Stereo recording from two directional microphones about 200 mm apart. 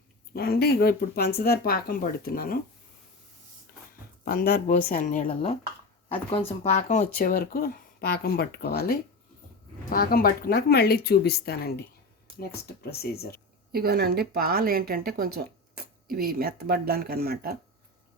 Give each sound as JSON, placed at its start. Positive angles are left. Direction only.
{"t": 0.3, "sound": "speech", "side_deg": 50}
{"t": 4.3, "sound": "speech", "side_deg": 50}
{"t": 6.6, "sound": "speech", "side_deg": 35}
{"t": 13.7, "sound": "speech", "side_deg": -50}